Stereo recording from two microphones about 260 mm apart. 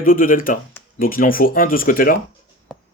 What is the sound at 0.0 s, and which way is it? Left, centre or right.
Speech, left.